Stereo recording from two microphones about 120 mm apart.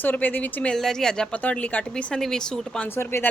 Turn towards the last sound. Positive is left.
turn(degrees=20)  # may be behind; listen again after turning